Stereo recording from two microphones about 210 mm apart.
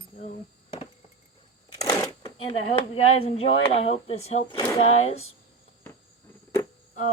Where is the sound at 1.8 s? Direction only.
15° left (ahead or behind).